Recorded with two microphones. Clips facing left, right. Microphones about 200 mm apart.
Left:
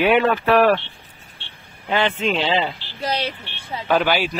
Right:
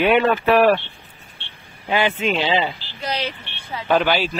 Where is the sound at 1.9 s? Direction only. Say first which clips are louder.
Even; 10° right (ahead or behind).